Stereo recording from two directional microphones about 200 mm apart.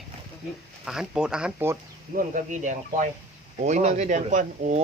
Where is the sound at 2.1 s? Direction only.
40° right (ahead or behind).